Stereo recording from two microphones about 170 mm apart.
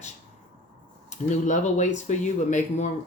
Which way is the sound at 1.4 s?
45° left (ahead or behind).